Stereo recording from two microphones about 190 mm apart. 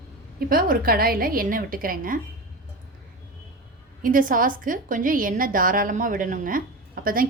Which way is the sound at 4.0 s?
45° right (ahead or behind).